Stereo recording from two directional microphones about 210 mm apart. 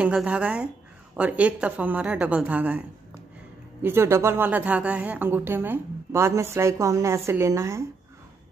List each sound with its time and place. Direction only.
0.0 s a woman's voice: 5° right (ahead or behind)
3.8 s a woman's voice: 10° right (ahead or behind)